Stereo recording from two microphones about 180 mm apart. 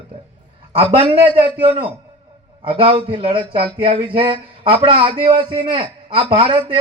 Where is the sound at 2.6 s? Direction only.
30° right (ahead or behind).